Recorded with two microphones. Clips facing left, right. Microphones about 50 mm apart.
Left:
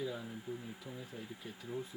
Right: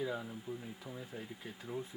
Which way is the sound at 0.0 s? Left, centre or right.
Right.